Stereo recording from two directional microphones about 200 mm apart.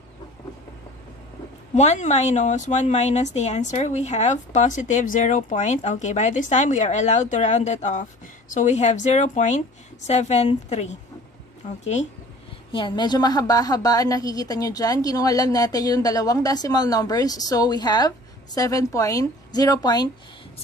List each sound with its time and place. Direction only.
1.8 s a woman's voice: 35° left (ahead or behind)
12.7 s a woman's voice: 20° left (ahead or behind)